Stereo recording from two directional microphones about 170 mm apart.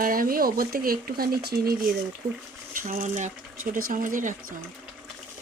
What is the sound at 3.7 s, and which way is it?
Speech, 55° right (ahead or behind).